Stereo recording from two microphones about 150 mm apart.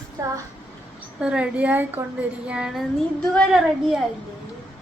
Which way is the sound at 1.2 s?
5° right (ahead or behind).